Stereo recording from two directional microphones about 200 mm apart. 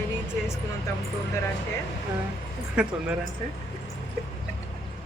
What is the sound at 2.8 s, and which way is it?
Speech, 5° right (ahead or behind).